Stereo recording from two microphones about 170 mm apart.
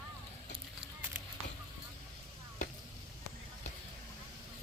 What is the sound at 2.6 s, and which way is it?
Chopping, 45° left (ahead or behind).